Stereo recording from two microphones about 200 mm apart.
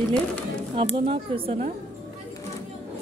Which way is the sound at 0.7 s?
25° right (ahead or behind).